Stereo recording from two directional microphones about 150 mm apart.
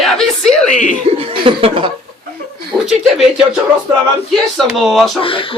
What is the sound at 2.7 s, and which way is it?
Speech, 5° right (ahead or behind).